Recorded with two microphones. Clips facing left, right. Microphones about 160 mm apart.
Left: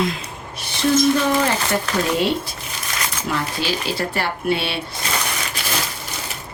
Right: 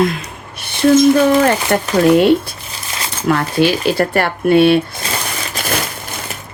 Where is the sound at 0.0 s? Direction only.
60° right (ahead or behind).